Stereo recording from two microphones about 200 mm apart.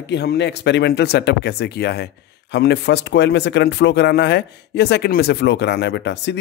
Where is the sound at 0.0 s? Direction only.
55° left (ahead or behind).